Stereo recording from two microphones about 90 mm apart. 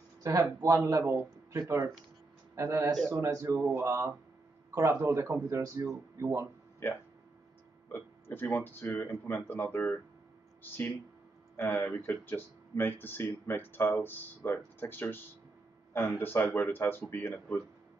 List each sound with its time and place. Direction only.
0.2 s speech: 40° right (ahead or behind)
6.1 s speech: 30° right (ahead or behind)
6.8 s speech: 25° left (ahead or behind)
11.8 s speech: 25° left (ahead or behind)